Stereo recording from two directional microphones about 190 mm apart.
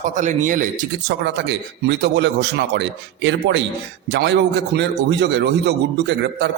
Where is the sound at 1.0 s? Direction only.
65° right (ahead or behind).